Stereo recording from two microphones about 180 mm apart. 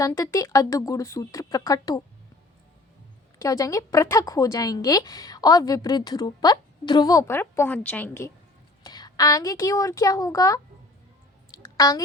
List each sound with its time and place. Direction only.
0.0 s a woman's voice: 15° left (ahead or behind)
3.3 s a woman's voice: 20° left (ahead or behind)
8.8 s a woman's voice: 25° left (ahead or behind)
11.5 s a sound: 20° left (ahead or behind)